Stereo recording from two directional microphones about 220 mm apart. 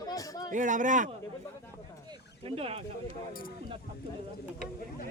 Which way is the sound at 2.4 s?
25° right (ahead or behind).